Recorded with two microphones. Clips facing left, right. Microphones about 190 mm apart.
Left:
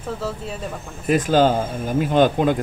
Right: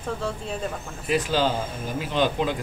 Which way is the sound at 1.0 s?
50° left (ahead or behind).